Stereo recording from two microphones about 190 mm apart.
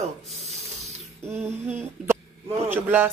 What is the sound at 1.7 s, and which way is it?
Speech, 10° right (ahead or behind).